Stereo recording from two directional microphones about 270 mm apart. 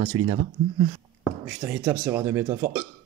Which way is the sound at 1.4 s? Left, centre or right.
Centre.